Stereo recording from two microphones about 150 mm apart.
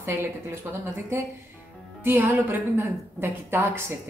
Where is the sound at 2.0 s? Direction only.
15° right (ahead or behind).